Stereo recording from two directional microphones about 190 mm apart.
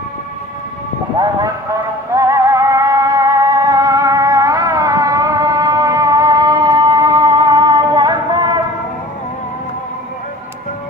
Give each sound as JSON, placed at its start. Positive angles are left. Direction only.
{"t": 1.1, "sound": "speech", "side_deg": -20}
{"t": 2.1, "sound": "music", "side_deg": -15}